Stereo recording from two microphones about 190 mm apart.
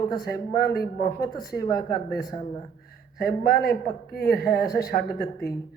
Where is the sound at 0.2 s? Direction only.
55° left (ahead or behind).